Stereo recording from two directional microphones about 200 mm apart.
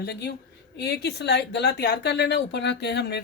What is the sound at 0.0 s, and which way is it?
Speech, 55° left (ahead or behind).